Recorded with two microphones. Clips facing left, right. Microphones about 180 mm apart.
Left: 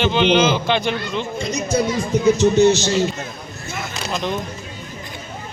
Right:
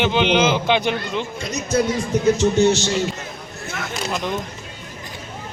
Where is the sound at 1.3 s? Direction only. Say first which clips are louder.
Left 3 dB; 10° left (ahead or behind).